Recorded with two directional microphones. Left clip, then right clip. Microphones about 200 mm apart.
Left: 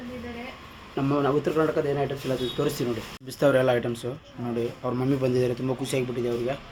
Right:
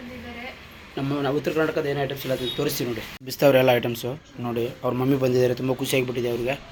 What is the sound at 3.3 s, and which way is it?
Speech, 5° right (ahead or behind).